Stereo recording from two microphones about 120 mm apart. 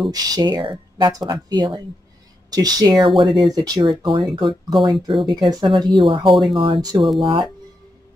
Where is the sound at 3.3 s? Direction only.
Centre (ahead or behind).